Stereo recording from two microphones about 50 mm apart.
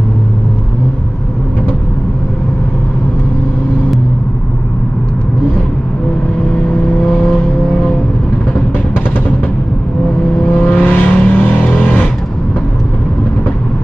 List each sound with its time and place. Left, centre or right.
10.3 s vehicle: left